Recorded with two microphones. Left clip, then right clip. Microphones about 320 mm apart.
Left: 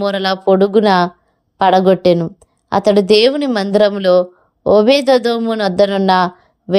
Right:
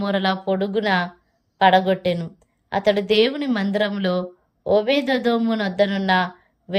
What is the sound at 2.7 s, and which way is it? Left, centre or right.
Speech, centre.